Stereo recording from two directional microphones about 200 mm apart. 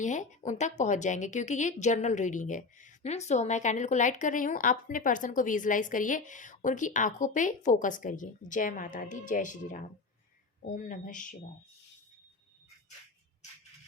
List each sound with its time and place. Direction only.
0.0 s a woman's voice: 40° left (ahead or behind)